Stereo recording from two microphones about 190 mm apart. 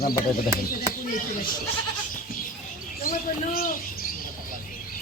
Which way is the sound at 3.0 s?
50° left (ahead or behind).